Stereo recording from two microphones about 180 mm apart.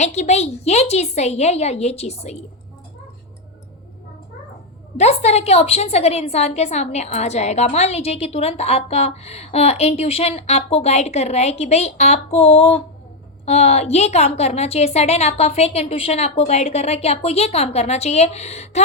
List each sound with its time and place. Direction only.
0.0 s a woman's voice: 40° left (ahead or behind)
4.9 s a woman's voice: 35° left (ahead or behind)